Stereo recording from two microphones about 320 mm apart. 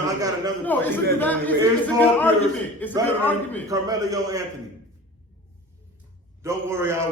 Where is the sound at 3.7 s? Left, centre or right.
Centre.